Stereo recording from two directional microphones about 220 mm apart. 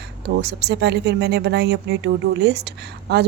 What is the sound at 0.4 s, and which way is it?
Speech, 50° right (ahead or behind).